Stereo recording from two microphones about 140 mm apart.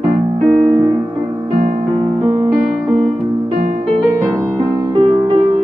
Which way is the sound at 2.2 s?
45° right (ahead or behind).